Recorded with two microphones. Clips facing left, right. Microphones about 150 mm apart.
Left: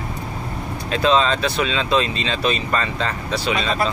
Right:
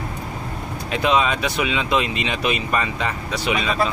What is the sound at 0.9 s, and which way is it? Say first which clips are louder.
Speech: left 2 dB; 15° right (ahead or behind).